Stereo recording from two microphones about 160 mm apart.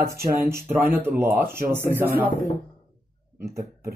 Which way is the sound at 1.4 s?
65° right (ahead or behind).